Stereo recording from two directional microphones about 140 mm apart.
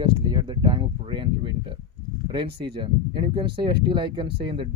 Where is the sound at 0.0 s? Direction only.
35° right (ahead or behind).